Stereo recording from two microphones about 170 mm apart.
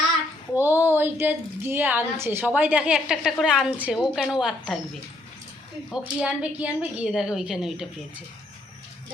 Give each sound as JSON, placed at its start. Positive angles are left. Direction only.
{"t": 0.5, "sound": "a woman's voice", "side_deg": -10}
{"t": 6.1, "sound": "a woman's voice", "side_deg": -5}